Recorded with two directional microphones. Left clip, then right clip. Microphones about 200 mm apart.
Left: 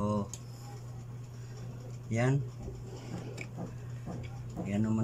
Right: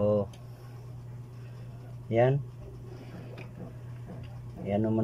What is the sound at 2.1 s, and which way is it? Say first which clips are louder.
Speech: right 8 dB; 30° right (ahead or behind).